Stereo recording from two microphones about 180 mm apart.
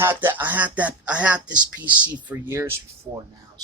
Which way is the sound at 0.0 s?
10° right (ahead or behind).